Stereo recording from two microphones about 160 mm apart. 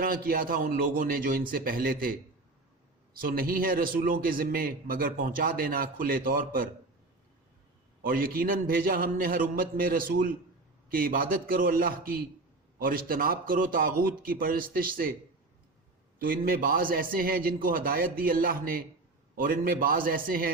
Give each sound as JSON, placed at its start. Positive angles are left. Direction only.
{"t": 0.0, "sound": "a man's voice", "side_deg": -65}
{"t": 8.0, "sound": "a man's voice", "side_deg": -65}
{"t": 16.1, "sound": "a man's voice", "side_deg": -65}